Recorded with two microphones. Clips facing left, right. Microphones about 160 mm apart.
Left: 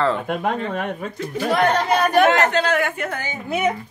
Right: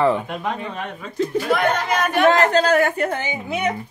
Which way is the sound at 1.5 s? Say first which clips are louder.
Left 5 dB; 35° left (ahead or behind).